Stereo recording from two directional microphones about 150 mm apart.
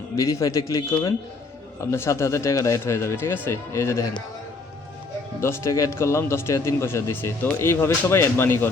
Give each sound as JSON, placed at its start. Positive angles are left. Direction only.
{"t": 0.2, "sound": "a man's voice", "side_deg": 20}
{"t": 5.4, "sound": "speech", "side_deg": 15}